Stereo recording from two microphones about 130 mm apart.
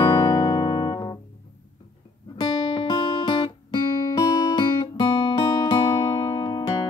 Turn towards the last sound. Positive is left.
turn(degrees=35)  # may be behind; listen again after turning